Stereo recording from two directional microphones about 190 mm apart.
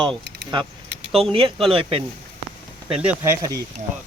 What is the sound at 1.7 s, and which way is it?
Speech, 30° right (ahead or behind).